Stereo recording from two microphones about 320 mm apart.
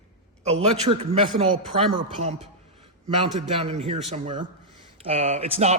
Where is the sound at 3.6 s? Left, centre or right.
Centre.